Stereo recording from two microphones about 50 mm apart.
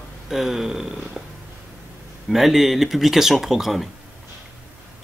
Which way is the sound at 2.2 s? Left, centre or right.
Centre.